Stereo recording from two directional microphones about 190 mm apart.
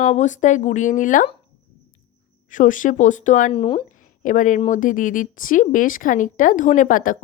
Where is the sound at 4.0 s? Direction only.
45° left (ahead or behind).